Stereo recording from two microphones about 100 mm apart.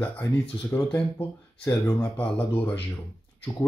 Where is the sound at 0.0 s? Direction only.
15° left (ahead or behind).